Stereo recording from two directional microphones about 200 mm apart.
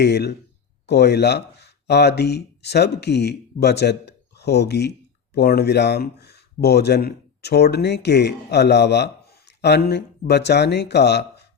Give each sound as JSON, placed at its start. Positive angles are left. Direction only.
{"t": 0.0, "sound": "speech", "side_deg": 55}